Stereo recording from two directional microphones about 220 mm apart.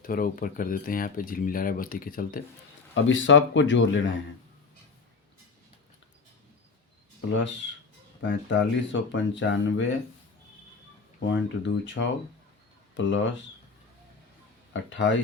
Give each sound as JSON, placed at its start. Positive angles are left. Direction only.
{"t": 0.0, "sound": "speech", "side_deg": 40}
{"t": 2.9, "sound": "speech", "side_deg": 60}
{"t": 7.3, "sound": "speech", "side_deg": 55}
{"t": 11.2, "sound": "speech", "side_deg": 55}
{"t": 14.7, "sound": "speech", "side_deg": 55}